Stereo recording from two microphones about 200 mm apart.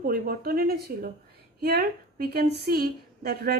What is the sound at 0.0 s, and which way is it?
A woman's voice, 45° right (ahead or behind).